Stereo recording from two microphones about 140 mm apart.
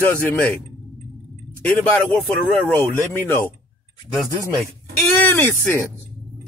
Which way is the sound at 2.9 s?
15° left (ahead or behind).